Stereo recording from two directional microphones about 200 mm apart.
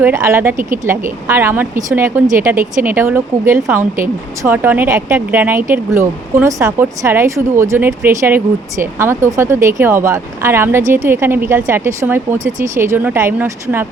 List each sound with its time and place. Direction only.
0.0 s speech: 15° right (ahead or behind)